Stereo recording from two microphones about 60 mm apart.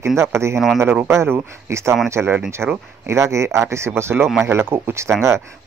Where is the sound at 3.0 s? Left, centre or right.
Right.